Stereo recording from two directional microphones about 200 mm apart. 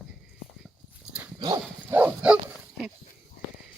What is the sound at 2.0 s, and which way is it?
Dog, 5° right (ahead or behind).